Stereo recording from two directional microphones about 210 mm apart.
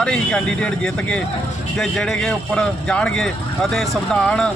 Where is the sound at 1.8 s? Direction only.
Centre (ahead or behind).